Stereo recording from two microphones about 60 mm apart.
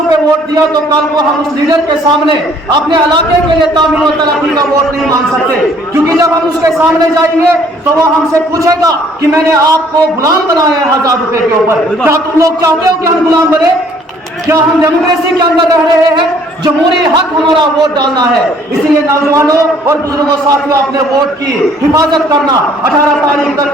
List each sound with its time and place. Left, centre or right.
6.1 s a man's voice: right
8.6 s a man's voice: right
10.2 s a man's voice: right
12.1 s a man's voice: right
19.3 s a man's voice: right